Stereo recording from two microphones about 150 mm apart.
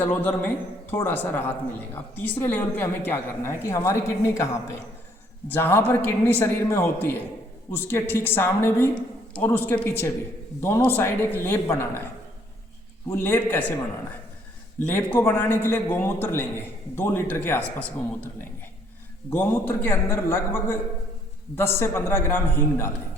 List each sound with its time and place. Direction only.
0.0 s a man's voice: 10° left (ahead or behind)
13.2 s a man's voice: 15° left (ahead or behind)
14.8 s a man's voice: 10° left (ahead or behind)
19.3 s a man's voice: 15° left (ahead or behind)